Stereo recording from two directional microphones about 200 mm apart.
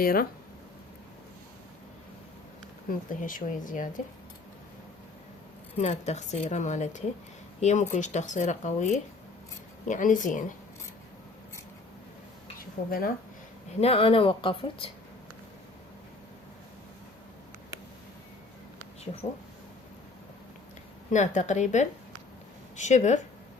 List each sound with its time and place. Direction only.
0.0 s speech: 45° left (ahead or behind)
3.1 s speech: 40° left (ahead or behind)
5.7 s speech: 30° left (ahead or behind)
12.5 s a sound: 45° left (ahead or behind)
13.8 s speech: 30° left (ahead or behind)
21.1 s speech: 35° left (ahead or behind)